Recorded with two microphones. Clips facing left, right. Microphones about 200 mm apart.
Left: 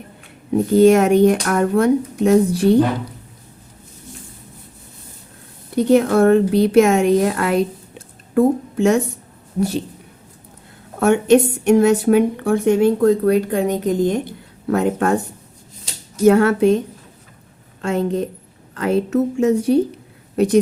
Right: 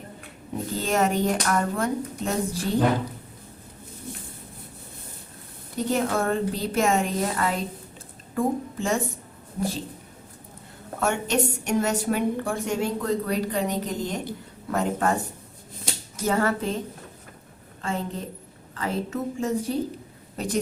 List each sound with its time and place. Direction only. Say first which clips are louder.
0.7 s a woman's voice: left 13 dB; 65° left (ahead or behind)
6.2 s a woman's voice: left 13 dB; 70° left (ahead or behind)
11.0 s a woman's voice: left 11 dB; 55° left (ahead or behind)
16.2 s a woman's voice: left 12 dB; 70° left (ahead or behind)
17.8 s a woman's voice: left 10 dB; 75° left (ahead or behind)